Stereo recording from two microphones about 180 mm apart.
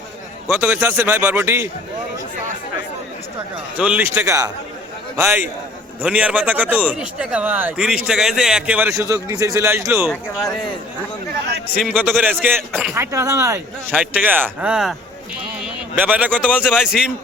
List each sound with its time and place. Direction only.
0.6 s a man's voice: 10° right (ahead or behind)
3.8 s a man's voice: 5° right (ahead or behind)
11.8 s a man's voice: 5° right (ahead or behind)
16.0 s a man's voice: 10° right (ahead or behind)